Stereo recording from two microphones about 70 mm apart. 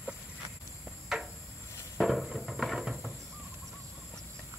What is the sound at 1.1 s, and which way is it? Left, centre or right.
Cricket, centre.